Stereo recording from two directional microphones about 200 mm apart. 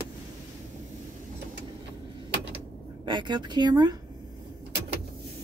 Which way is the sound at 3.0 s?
20° right (ahead or behind).